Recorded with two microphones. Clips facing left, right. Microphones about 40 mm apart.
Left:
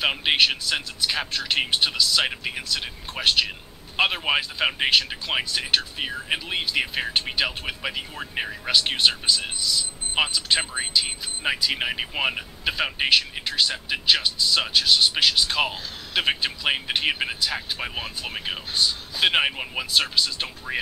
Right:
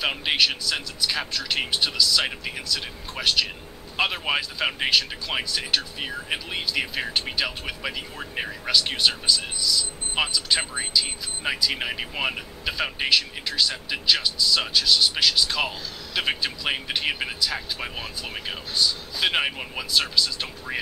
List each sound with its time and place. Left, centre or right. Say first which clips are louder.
0.0 s speech: left 2 dB; centre
8.7 s speech: left 1 dB; left
19.9 s speech: even; left
20.7 s speech: left 2 dB; centre